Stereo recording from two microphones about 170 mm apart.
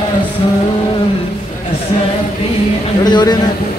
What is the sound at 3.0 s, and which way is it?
Speech, 25° left (ahead or behind).